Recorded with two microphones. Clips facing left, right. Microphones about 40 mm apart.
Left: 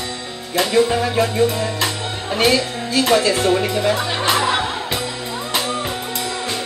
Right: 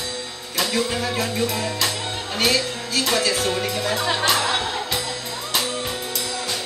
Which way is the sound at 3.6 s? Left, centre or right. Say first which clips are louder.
Left 4 dB; left.